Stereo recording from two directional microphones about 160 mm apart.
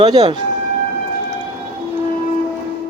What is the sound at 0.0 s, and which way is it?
Speech, 30° right (ahead or behind).